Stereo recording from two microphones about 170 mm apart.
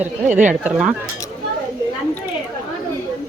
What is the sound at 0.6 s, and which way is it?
Speech, 5° right (ahead or behind).